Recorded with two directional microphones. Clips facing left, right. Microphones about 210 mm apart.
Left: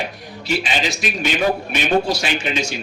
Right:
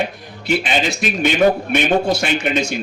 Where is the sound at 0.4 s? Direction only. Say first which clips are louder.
Right 3 dB; 55° right (ahead or behind).